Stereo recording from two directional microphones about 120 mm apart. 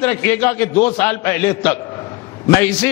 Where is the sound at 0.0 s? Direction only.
20° left (ahead or behind).